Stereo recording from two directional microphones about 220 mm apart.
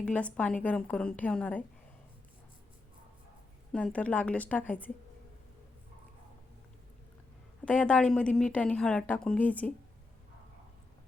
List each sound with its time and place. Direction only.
0.0 s a woman's voice: 5° left (ahead or behind)
3.7 s a woman's voice: 5° left (ahead or behind)
7.6 s a woman's voice: 5° left (ahead or behind)